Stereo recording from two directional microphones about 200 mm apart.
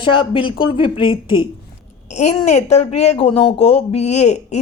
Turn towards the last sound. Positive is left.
turn(degrees=35)  # may be behind; listen again after turning